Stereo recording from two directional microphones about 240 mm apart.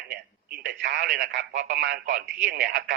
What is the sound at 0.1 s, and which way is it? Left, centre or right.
Speech, right.